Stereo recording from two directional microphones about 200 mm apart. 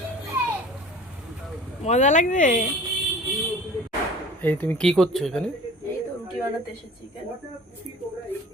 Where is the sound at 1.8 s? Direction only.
35° left (ahead or behind).